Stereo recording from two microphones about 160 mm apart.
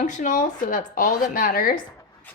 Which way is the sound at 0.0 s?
50° left (ahead or behind).